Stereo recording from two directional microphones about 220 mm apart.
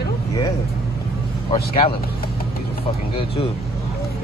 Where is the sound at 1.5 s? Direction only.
25° left (ahead or behind).